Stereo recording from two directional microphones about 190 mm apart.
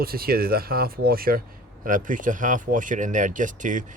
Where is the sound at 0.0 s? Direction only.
50° right (ahead or behind).